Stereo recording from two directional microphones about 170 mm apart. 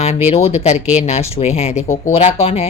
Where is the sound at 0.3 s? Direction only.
40° left (ahead or behind).